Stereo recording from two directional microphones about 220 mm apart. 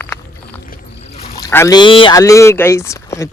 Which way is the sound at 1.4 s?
10° left (ahead or behind).